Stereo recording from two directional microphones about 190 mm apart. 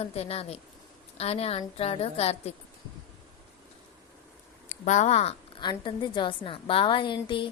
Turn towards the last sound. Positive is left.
turn(degrees=25)  # may be behind; listen again after turning